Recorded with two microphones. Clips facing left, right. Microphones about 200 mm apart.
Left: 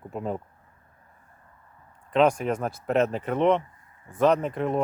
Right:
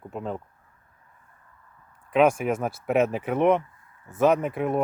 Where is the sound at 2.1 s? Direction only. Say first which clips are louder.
Right 1 dB; 5° right (ahead or behind).